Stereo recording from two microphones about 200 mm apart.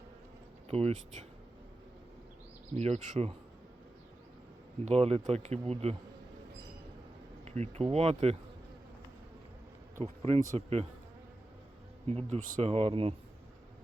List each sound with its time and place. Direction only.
0.7 s speech: 30° right (ahead or behind)
2.7 s speech: 30° right (ahead or behind)
4.9 s speech: 30° right (ahead or behind)
7.4 s speech: 35° right (ahead or behind)
10.0 s speech: 30° right (ahead or behind)
12.0 s speech: 30° right (ahead or behind)